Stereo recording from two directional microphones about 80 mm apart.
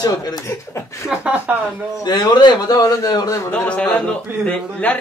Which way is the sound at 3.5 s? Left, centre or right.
Centre.